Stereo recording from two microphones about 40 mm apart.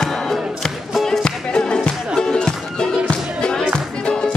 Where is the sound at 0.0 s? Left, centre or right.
Centre.